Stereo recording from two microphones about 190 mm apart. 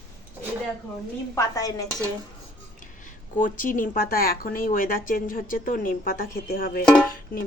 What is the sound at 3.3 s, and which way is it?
Speech, 45° left (ahead or behind).